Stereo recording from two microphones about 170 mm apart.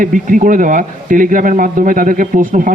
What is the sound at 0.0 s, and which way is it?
A man's voice, 50° right (ahead or behind).